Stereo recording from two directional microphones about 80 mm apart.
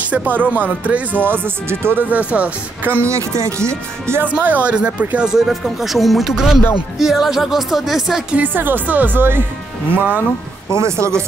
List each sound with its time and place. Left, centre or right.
0.1 s speech: centre
3.1 s speech: right
4.2 s speech: right; by 8.4 s centre
8.4 s speech: right
10.8 s speech: right